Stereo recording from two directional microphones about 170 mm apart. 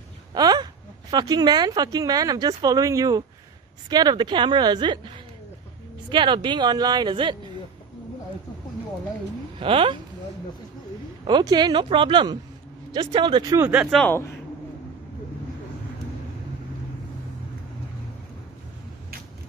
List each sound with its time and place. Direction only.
0.3 s a sound: 25° right (ahead or behind)
1.1 s speech: 25° right (ahead or behind)
9.6 s speech: 30° right (ahead or behind)
11.2 s speech: 25° right (ahead or behind)
13.6 s speech: 10° right (ahead or behind)
13.9 s speech: 10° left (ahead or behind)